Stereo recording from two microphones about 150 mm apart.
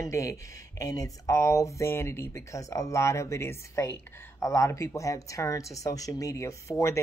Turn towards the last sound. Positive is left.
turn(degrees=20)  # may be behind; listen again after turning